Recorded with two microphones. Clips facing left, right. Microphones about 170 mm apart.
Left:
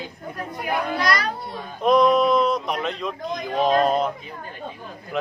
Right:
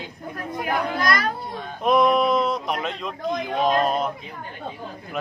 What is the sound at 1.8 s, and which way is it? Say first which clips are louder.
A man's voice: left 2 dB; centre (ahead or behind).